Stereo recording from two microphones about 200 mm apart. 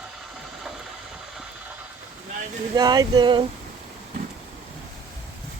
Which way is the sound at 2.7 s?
20° right (ahead or behind).